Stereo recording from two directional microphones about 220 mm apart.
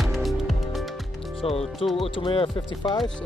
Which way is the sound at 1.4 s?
25° left (ahead or behind).